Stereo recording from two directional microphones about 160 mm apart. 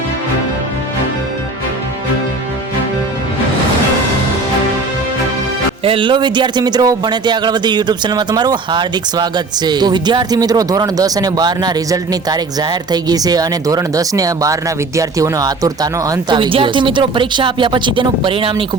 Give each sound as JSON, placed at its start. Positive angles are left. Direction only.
{"t": 5.8, "sound": "speech", "side_deg": -35}